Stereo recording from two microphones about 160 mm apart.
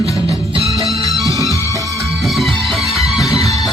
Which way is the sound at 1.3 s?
20° right (ahead or behind).